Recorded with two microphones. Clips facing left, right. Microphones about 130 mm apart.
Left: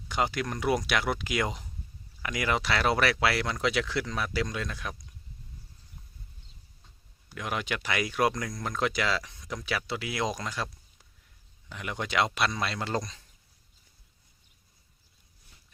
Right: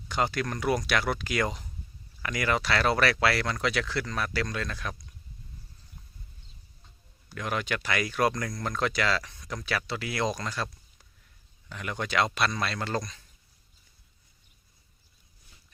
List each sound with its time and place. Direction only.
0.1 s speech: 15° left (ahead or behind)
7.3 s speech: 15° left (ahead or behind)
11.7 s speech: 15° left (ahead or behind)